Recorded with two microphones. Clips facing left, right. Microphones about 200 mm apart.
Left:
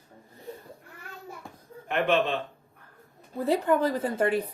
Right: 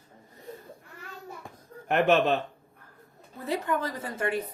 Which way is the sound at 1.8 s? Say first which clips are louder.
Right 3 dB; 45° right (ahead or behind).